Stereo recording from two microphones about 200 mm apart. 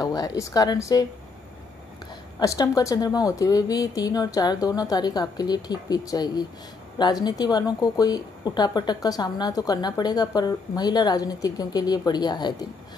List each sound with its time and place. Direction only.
0.0 s speech: 20° left (ahead or behind)
2.3 s a woman's voice: 20° left (ahead or behind)